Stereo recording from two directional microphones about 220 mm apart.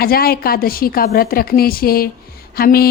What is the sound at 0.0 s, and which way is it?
A woman's voice, 45° left (ahead or behind).